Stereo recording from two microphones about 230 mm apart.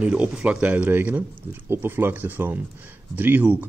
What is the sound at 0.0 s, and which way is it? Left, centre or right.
A man's voice, centre.